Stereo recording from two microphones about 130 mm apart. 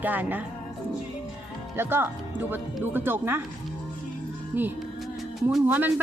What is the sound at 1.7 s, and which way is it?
A man's voice, 15° right (ahead or behind).